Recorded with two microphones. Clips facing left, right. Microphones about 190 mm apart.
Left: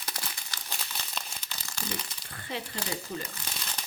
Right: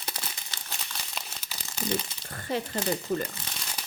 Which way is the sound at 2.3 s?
45° right (ahead or behind).